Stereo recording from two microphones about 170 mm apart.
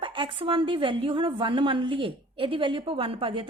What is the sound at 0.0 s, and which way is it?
A woman's voice, 30° right (ahead or behind).